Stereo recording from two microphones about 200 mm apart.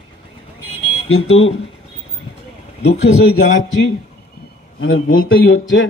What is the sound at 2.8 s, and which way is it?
Speech, 60° left (ahead or behind).